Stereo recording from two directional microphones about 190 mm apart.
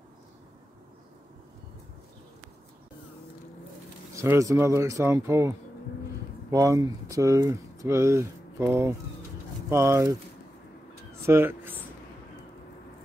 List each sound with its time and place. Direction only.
4.1 s speech: 15° right (ahead or behind)
11.2 s speech: 10° right (ahead or behind)